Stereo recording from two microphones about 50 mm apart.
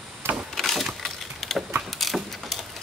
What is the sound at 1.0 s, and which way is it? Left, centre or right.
Splinter, centre.